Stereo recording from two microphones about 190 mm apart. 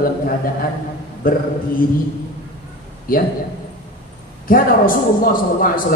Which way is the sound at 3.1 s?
50° left (ahead or behind).